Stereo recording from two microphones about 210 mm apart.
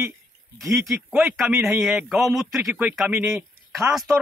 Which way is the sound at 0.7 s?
Centre (ahead or behind).